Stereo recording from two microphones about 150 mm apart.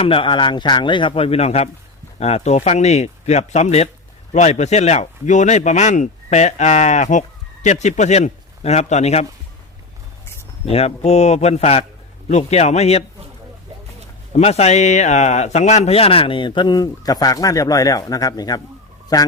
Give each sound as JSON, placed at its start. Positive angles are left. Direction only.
{"t": 0.0, "sound": "a man's voice", "side_deg": 35}
{"t": 10.7, "sound": "speech", "side_deg": 45}
{"t": 14.3, "sound": "a man's voice", "side_deg": 45}